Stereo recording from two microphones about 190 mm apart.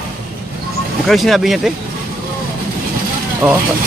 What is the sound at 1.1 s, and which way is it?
Speech, centre (ahead or behind).